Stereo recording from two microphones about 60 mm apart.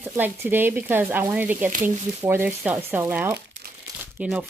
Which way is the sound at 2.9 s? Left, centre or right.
Right.